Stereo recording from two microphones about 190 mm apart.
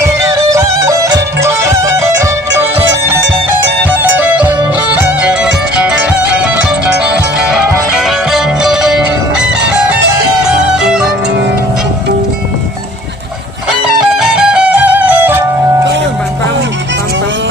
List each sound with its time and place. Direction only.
0.0 s music: 15° right (ahead or behind)
3.8 s music: 10° right (ahead or behind)
10.4 s music: 5° right (ahead or behind)
13.7 s music: 5° right (ahead or behind)